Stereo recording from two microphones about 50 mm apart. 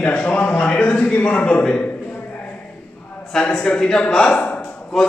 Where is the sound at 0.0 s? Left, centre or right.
Left.